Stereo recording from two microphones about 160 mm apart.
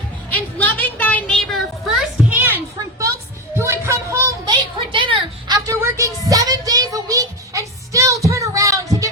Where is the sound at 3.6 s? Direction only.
15° right (ahead or behind).